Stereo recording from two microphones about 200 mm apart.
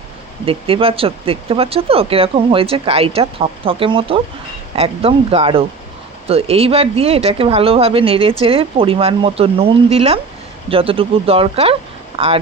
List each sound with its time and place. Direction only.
0.4 s speech: 30° right (ahead or behind)